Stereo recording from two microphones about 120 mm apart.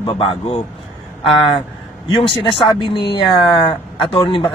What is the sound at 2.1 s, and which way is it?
Speech, 45° left (ahead or behind).